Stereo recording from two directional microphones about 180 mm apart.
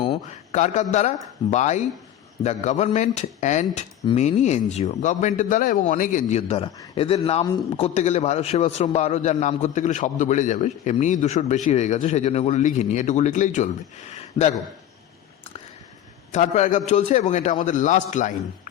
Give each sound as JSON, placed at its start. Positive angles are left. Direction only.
{"t": 0.0, "sound": "a man's voice", "side_deg": 35}
{"t": 16.3, "sound": "a man's voice", "side_deg": 40}